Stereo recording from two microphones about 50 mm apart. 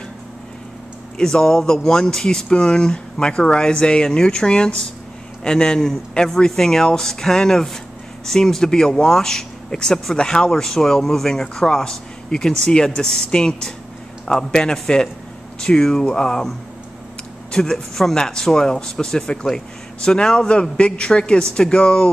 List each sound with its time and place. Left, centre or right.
1.1 s a man's voice: centre